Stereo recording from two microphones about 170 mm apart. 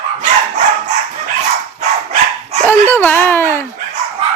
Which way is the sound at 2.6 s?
15° left (ahead or behind).